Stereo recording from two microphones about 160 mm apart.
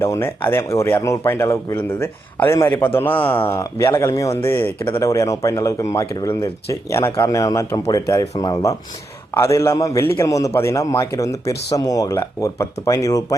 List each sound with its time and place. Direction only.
0.0 s speech: 15° left (ahead or behind)